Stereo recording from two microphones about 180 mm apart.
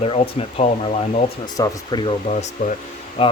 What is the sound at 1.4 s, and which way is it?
Speech, 20° left (ahead or behind).